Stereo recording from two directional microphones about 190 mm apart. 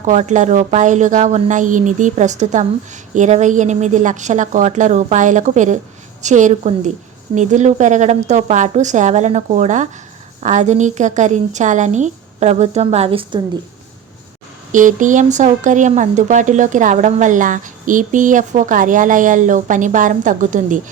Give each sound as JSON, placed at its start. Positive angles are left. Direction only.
{"t": 0.0, "sound": "speech", "side_deg": -40}
{"t": 14.7, "sound": "speech", "side_deg": -40}